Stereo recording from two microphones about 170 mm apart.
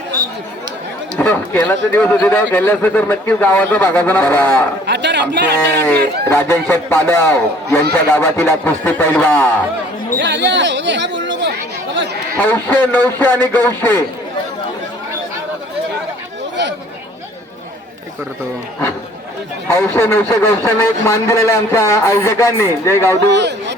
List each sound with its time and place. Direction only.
1.2 s speech: 10° left (ahead or behind)
4.9 s a man's voice: 90° right
6.2 s speech: 15° left (ahead or behind)
10.2 s chatter: 90° right
12.4 s speech: 10° left (ahead or behind)
19.6 s speech: 15° left (ahead or behind)
23.3 s speech: 90° right